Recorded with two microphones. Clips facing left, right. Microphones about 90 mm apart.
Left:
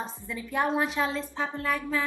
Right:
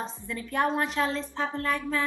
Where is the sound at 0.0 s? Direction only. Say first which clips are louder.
Right 1 dB; 5° left (ahead or behind).